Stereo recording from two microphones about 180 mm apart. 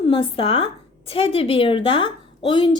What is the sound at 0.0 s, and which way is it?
A woman's voice, 30° left (ahead or behind).